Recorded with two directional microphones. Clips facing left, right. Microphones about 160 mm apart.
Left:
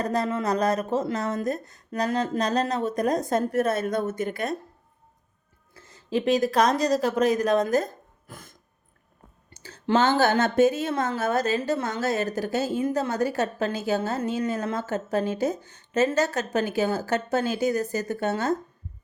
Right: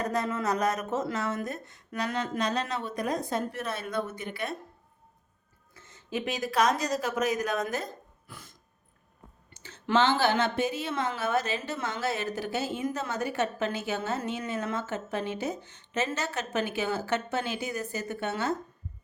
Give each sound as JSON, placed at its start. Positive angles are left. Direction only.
{"t": 0.0, "sound": "a woman's voice", "side_deg": 35}
{"t": 5.7, "sound": "speech", "side_deg": 35}
{"t": 9.5, "sound": "a woman's voice", "side_deg": 40}